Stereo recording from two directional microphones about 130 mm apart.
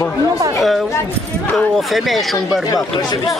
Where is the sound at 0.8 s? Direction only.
20° left (ahead or behind).